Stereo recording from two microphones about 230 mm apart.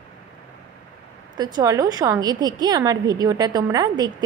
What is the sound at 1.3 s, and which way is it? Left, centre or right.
A woman's voice, centre.